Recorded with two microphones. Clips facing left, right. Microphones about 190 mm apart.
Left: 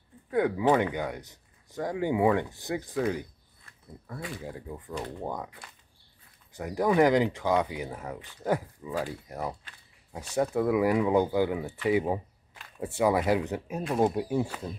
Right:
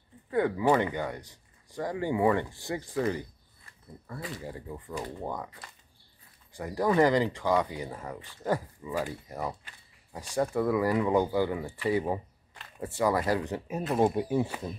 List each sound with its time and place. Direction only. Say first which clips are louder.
0.3 s speech: left 1 dB; 10° left (ahead or behind)
1.2 s a sound: left 1 dB; 20° left (ahead or behind)
2.0 s speech: left 2 dB; 15° left (ahead or behind)
2.9 s speech: right 1 dB; 5° left (ahead or behind)
11.9 s a sound: left 2 dB; 10° left (ahead or behind)
13.0 s speech: left 2 dB; 10° left (ahead or behind)